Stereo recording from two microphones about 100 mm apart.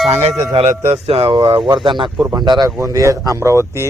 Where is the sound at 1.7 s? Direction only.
55° right (ahead or behind).